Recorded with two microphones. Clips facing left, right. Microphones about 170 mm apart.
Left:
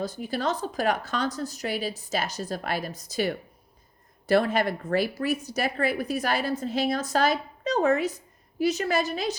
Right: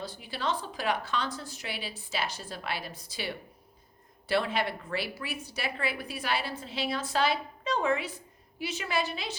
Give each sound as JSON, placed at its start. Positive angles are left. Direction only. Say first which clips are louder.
{"t": 0.0, "sound": "a woman's voice", "louder": "left 6 dB", "side_deg": 45}